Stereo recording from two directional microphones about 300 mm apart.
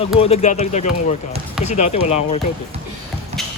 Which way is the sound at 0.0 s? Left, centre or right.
Centre.